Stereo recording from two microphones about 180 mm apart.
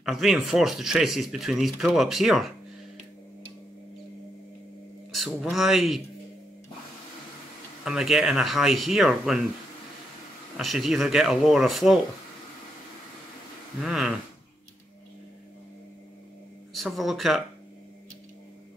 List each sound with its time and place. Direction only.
0.0 s speech: centre (ahead or behind)
5.1 s speech: centre (ahead or behind)
7.8 s speech: centre (ahead or behind)
10.6 s speech: centre (ahead or behind)
13.7 s speech: centre (ahead or behind)
16.7 s speech: centre (ahead or behind)